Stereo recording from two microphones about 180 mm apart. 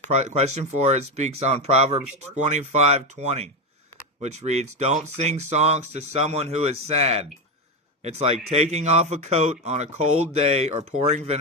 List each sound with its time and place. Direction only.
0.1 s speech: 40° right (ahead or behind)